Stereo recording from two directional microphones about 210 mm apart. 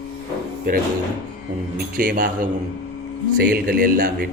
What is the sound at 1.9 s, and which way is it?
Mantra, 40° right (ahead or behind).